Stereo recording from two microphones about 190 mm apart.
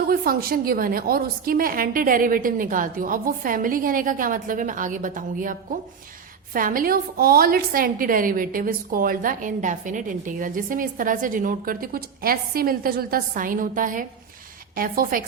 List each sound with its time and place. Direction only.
0.1 s a woman's voice: 50° right (ahead or behind)